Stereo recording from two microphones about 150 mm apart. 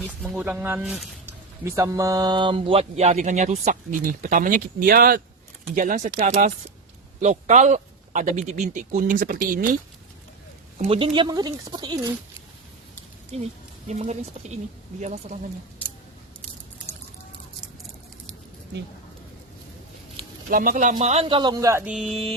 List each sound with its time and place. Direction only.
0.3 s speech: 10° right (ahead or behind); by 3.8 s 50° right (ahead or behind)
4.0 s speech: 65° right (ahead or behind)
5.7 s speech: 60° right (ahead or behind)
7.2 s speech: 50° right (ahead or behind); by 9.6 s 70° right (ahead or behind)
10.8 s speech: 40° right (ahead or behind)
13.3 s speech: 45° right (ahead or behind)
20.5 s speech: 70° right (ahead or behind)
21.0 s speech: 45° right (ahead or behind); by 21.8 s 20° right (ahead or behind)
21.8 s speech: 5° right (ahead or behind)